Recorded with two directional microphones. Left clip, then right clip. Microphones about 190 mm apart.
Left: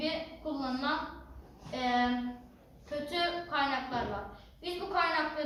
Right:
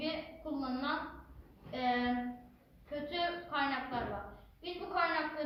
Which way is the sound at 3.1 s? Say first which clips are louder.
Left 4 dB; 15° left (ahead or behind).